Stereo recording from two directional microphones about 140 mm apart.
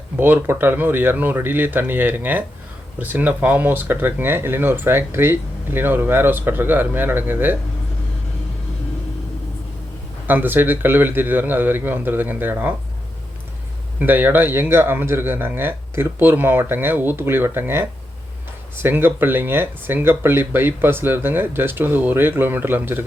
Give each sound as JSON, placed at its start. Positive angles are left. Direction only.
{"t": 0.2, "sound": "speech", "side_deg": -15}
{"t": 10.2, "sound": "speech", "side_deg": -15}
{"t": 14.0, "sound": "speech", "side_deg": -15}